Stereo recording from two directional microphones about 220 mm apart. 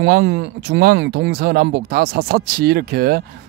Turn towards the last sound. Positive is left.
turn(degrees=-45)  # may be behind; listen again after turning